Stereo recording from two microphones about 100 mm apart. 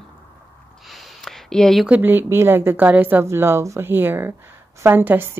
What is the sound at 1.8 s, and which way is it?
A woman's voice, 15° right (ahead or behind).